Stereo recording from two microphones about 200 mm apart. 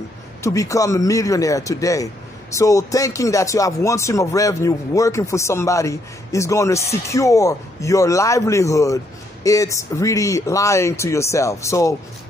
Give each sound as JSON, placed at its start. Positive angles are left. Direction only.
{"t": 0.4, "sound": "speech", "side_deg": 15}